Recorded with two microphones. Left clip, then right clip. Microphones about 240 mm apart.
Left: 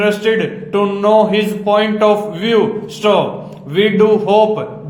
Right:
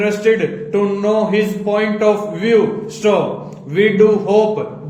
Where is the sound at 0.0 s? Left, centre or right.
Centre.